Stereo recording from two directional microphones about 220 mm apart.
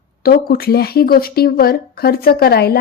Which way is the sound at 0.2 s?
45° left (ahead or behind).